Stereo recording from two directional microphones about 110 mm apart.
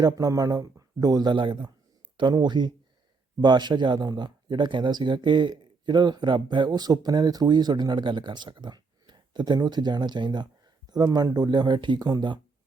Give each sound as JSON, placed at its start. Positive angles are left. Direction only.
{"t": 0.0, "sound": "speech", "side_deg": -35}